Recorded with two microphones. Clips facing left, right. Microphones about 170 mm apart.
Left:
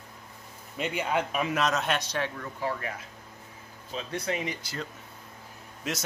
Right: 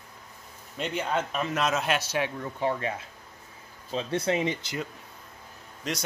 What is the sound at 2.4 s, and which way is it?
Speech, 25° right (ahead or behind).